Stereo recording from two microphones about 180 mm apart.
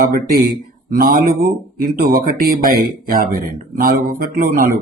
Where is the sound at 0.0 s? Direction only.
55° right (ahead or behind).